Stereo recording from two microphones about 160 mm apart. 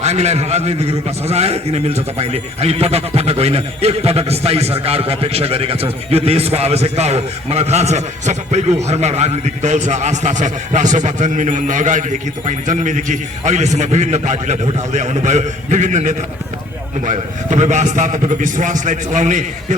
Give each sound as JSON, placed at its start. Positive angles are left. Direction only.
{"t": 0.0, "sound": "a man's voice", "side_deg": -45}